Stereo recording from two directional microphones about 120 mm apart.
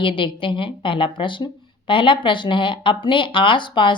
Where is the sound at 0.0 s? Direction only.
45° left (ahead or behind).